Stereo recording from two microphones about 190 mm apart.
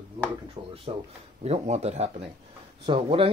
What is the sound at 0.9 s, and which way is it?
Speech, 35° right (ahead or behind).